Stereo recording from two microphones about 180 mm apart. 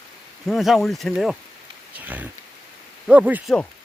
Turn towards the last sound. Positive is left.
turn(degrees=-10)  # may be behind; listen again after turning